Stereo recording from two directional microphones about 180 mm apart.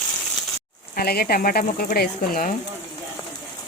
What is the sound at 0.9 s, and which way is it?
Speech, 55° left (ahead or behind).